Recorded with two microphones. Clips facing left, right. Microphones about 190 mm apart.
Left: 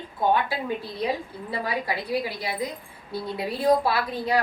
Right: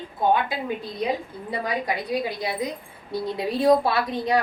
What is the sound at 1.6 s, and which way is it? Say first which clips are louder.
A woman's voice: right 2 dB; 20° right (ahead or behind).